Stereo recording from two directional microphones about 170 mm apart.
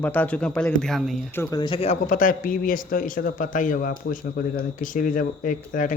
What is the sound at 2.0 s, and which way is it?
A man's voice, 55° left (ahead or behind).